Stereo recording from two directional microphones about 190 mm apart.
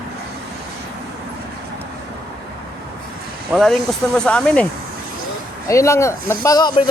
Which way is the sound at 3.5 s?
Centre (ahead or behind).